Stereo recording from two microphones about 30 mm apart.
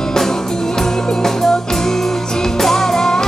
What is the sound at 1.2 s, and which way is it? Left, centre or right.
Music, centre.